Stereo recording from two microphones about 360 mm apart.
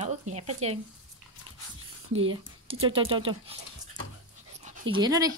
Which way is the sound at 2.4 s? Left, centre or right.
Centre.